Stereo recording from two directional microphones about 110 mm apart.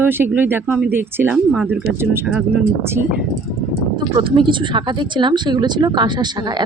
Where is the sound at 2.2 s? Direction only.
5° right (ahead or behind).